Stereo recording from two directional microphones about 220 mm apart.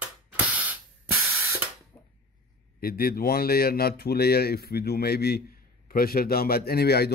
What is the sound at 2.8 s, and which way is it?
A man's voice, 45° left (ahead or behind).